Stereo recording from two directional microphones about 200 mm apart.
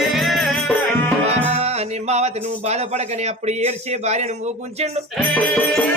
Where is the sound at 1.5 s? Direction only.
35° right (ahead or behind).